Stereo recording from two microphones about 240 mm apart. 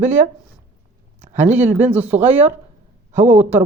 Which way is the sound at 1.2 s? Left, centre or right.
Right.